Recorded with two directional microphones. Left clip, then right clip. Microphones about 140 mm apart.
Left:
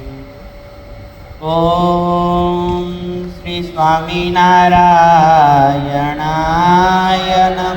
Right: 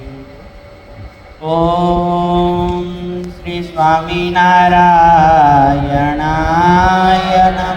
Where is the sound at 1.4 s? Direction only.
45° left (ahead or behind).